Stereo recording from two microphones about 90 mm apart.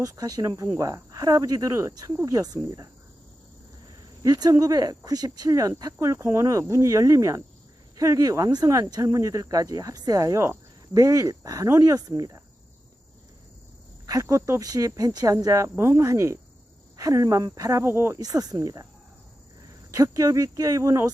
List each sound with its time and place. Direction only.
0.0 s speech: 45° right (ahead or behind)
4.2 s speech: 45° right (ahead or behind)
8.4 s speech: 50° right (ahead or behind)
14.1 s speech: 35° right (ahead or behind)
17.8 s speech: 25° right (ahead or behind)
18.2 s speech: 45° right (ahead or behind)
19.9 s speech: 40° right (ahead or behind)